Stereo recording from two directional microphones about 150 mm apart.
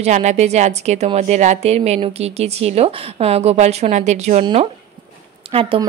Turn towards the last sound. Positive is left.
turn(degrees=-40)  # may be behind; listen again after turning